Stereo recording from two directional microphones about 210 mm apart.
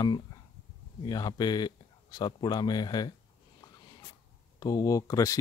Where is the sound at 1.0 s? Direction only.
20° left (ahead or behind).